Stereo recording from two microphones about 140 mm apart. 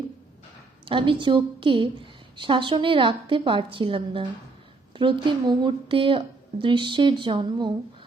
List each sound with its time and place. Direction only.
0.9 s a woman's voice: 35° right (ahead or behind)